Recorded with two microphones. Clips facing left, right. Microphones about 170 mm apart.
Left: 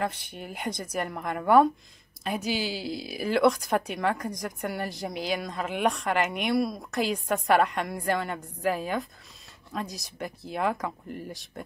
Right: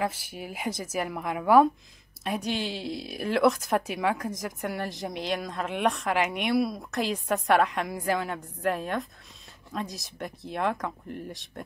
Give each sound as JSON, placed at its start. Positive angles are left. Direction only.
{"t": 0.0, "sound": "speech", "side_deg": -5}